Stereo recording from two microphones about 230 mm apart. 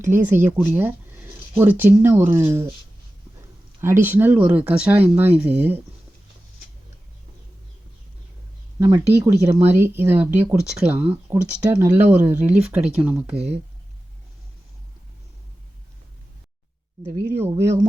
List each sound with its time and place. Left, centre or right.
0.1 s speech: centre
3.8 s speech: centre
9.1 s speech: centre
17.0 s speech: centre